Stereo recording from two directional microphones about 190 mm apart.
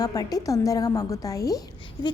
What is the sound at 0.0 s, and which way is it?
A woman's voice, 20° left (ahead or behind).